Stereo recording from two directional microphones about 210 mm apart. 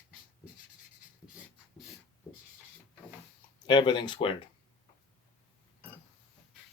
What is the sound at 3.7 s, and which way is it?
Speech, 20° left (ahead or behind).